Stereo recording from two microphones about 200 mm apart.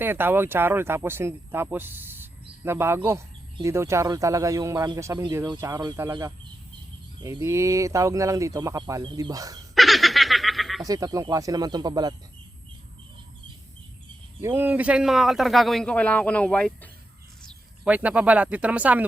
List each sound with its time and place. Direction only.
0.0 s speech: 10° right (ahead or behind)
9.7 s snicker: centre (ahead or behind)
10.8 s speech: 20° right (ahead or behind)
14.4 s speech: 10° right (ahead or behind); by 16.9 s 5° left (ahead or behind)
17.8 s speech: 5° right (ahead or behind)